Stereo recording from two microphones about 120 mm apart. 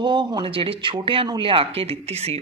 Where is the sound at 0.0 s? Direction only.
40° right (ahead or behind).